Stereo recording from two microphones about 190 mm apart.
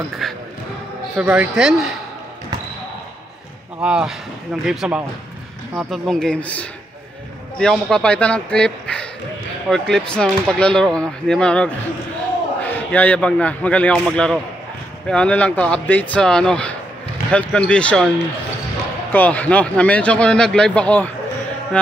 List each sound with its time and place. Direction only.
0.2 s basketball bounce: centre (ahead or behind)
1.1 s speech: 10° right (ahead or behind)
3.8 s speech: 5° right (ahead or behind)
19.1 s speech: 10° left (ahead or behind)